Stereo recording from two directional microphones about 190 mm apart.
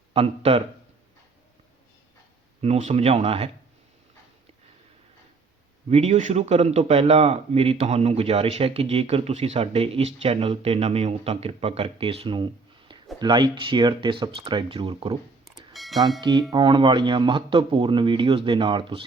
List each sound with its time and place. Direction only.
0.1 s a man's voice: 30° right (ahead or behind)
2.6 s a man's voice: 35° right (ahead or behind)
5.9 s a man's voice: 40° right (ahead or behind)
15.7 s bell: centre (ahead or behind)
16.2 s speech: 25° right (ahead or behind)